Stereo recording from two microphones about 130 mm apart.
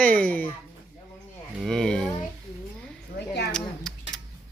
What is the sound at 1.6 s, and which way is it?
Speech, 5° left (ahead or behind).